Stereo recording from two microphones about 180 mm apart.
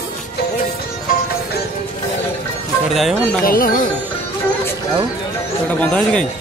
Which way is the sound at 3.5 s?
50° left (ahead or behind).